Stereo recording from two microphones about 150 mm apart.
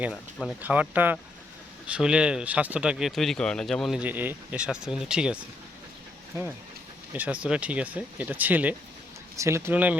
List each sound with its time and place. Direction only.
0.6 s speech: 10° right (ahead or behind)
4.0 s speech: 10° right (ahead or behind)
7.1 s speech: 10° right (ahead or behind)